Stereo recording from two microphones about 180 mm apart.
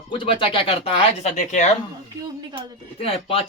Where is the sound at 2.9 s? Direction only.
30° left (ahead or behind).